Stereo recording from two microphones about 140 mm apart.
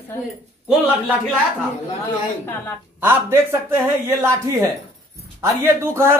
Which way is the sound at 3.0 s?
15° right (ahead or behind).